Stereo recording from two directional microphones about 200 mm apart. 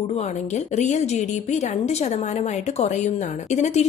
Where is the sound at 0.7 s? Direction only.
35° left (ahead or behind).